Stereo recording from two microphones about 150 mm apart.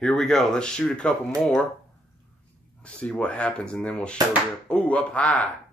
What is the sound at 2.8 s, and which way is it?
Speech, 5° left (ahead or behind).